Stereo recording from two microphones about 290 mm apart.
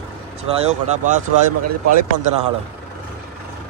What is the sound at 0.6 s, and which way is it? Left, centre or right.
Speech, right.